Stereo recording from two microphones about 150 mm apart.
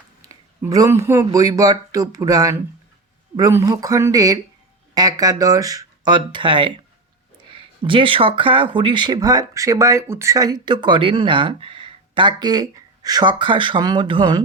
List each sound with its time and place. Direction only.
0.2 s speech: 20° right (ahead or behind)